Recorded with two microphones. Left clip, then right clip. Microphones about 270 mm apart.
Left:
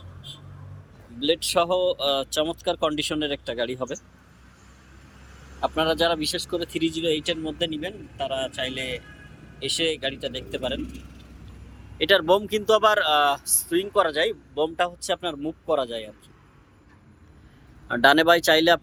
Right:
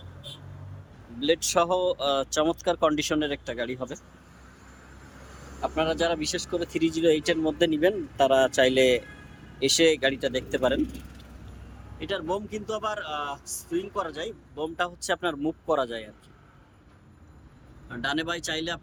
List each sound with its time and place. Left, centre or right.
1.2 s speech: centre
5.6 s speech: centre
11.9 s speech: centre
17.8 s speech: centre